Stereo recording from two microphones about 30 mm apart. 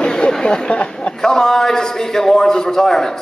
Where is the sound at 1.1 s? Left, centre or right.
Centre.